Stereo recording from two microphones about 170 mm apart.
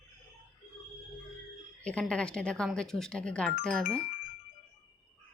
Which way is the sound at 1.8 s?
5° left (ahead or behind).